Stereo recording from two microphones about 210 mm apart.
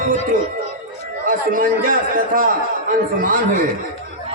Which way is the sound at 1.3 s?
40° right (ahead or behind).